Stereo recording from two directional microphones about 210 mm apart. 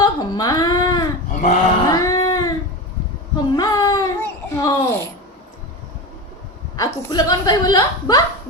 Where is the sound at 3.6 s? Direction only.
15° left (ahead or behind).